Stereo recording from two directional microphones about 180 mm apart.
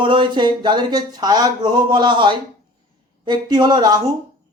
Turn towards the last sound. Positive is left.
turn(degrees=-25)  # may be behind; listen again after turning